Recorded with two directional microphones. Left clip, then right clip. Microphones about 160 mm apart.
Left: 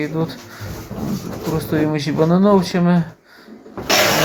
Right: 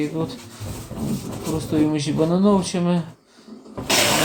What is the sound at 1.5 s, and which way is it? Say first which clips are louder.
Speech: left 2 dB; 15° left (ahead or behind).